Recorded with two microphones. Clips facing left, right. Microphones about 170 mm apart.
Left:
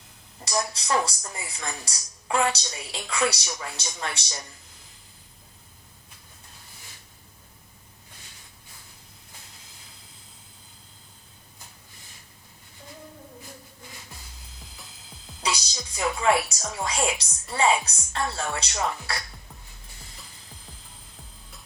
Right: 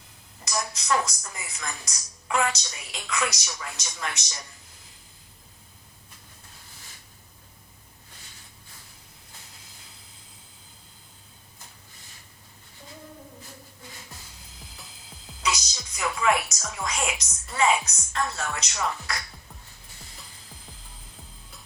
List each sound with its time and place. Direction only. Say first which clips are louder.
0.4 s a woman's voice: left 1 dB; 30° left (ahead or behind)
15.4 s music: even; 30° left (ahead or behind)